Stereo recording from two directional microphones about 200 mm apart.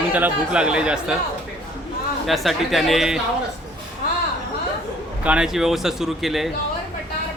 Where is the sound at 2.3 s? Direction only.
Centre (ahead or behind).